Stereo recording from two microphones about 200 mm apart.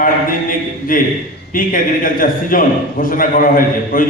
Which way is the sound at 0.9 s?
45° left (ahead or behind).